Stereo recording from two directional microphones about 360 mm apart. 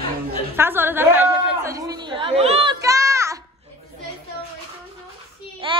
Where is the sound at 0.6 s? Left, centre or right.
Centre.